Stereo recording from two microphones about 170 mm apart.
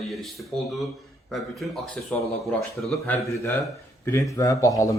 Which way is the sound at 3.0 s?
15° left (ahead or behind).